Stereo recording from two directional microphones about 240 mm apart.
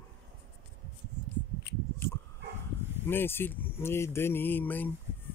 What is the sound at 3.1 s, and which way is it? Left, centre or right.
Speech, centre.